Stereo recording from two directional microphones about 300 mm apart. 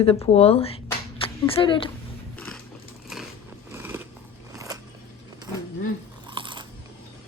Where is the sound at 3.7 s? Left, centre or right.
Centre.